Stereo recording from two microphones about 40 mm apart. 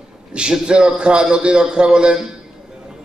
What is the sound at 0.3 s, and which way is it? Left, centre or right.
A man's voice, right.